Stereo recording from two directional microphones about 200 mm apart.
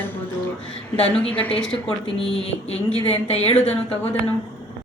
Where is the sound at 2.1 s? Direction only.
30° left (ahead or behind).